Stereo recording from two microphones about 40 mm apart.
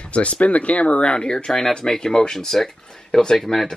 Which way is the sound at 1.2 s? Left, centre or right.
Centre.